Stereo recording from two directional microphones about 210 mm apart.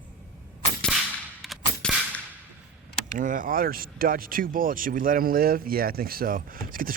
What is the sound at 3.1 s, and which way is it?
Speech, 40° right (ahead or behind).